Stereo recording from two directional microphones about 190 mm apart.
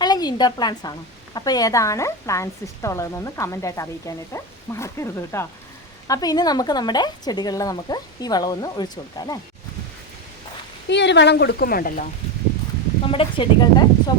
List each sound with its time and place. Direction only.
0.0 s a woman's voice: 20° left (ahead or behind)
10.8 s speech: 65° left (ahead or behind); by 12.0 s 50° left (ahead or behind)
13.1 s speech: 25° left (ahead or behind)